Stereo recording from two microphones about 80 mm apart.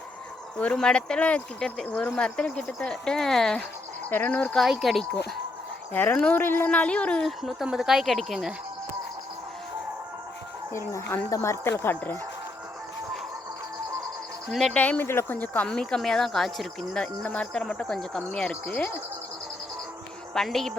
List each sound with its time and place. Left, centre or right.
0.6 s speech: centre
4.1 s speech: left
4.5 s a woman's voice: centre
5.9 s speech: left
6.4 s speech: left
6.7 s speech: centre
7.3 s a woman's voice: centre
10.7 s speech: left
14.7 s speech: centre
15.0 s speech: left
20.3 s a woman's voice: centre